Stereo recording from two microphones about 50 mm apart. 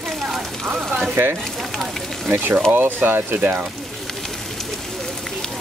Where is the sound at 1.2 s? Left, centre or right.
Right.